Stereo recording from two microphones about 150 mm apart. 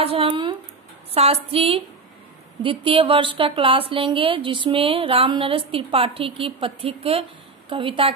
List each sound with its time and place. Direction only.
0.0 s a woman's voice: 40° right (ahead or behind)